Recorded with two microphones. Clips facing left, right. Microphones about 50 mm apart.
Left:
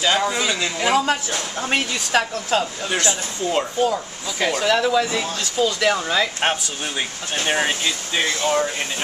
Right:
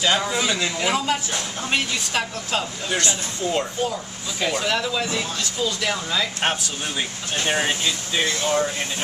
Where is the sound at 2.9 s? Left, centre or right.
Centre.